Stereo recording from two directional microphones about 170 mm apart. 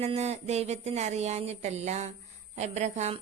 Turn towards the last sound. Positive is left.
turn(degrees=-40)  # may be behind; listen again after turning